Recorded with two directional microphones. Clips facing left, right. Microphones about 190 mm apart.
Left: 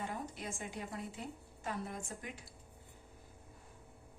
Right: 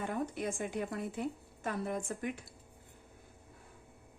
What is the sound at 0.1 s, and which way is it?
A woman's voice, 55° right (ahead or behind).